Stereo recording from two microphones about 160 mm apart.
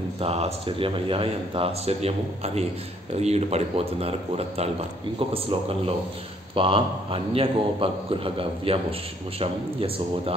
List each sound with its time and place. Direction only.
0.2 s speech: 40° right (ahead or behind)